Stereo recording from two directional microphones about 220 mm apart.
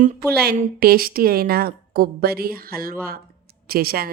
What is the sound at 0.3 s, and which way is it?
A woman's voice, 45° right (ahead or behind).